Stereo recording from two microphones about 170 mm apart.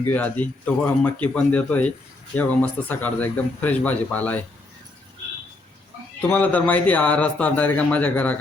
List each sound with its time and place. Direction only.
0.1 s speech: 10° left (ahead or behind)
6.2 s speech: 10° left (ahead or behind)